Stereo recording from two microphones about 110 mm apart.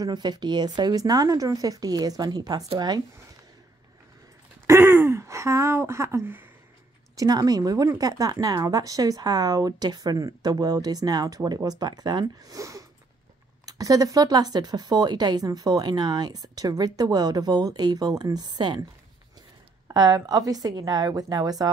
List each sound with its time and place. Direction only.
0.0 s speech: 40° right (ahead or behind)
4.6 s a sound: 25° right (ahead or behind)
7.2 s speech: 35° right (ahead or behind)
19.9 s speech: 35° right (ahead or behind)